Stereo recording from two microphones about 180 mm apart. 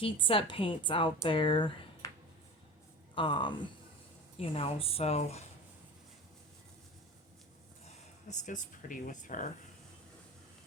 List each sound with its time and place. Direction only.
0.0 s speech: 30° left (ahead or behind)
3.2 s speech: 25° left (ahead or behind)
7.9 s speech: 40° left (ahead or behind)